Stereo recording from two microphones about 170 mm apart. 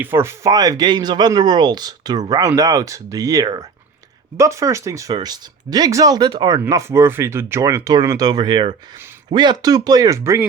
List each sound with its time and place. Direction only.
0.0 s speech: 15° right (ahead or behind)